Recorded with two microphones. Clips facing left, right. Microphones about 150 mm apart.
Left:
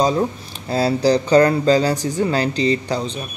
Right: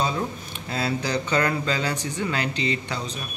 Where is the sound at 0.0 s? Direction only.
35° left (ahead or behind).